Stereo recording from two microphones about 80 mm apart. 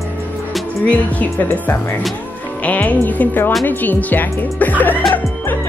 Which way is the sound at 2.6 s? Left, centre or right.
Centre.